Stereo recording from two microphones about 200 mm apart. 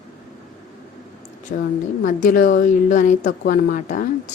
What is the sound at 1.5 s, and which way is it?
A woman's voice, 50° left (ahead or behind).